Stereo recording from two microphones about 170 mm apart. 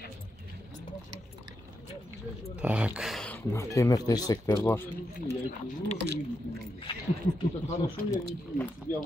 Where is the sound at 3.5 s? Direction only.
20° left (ahead or behind).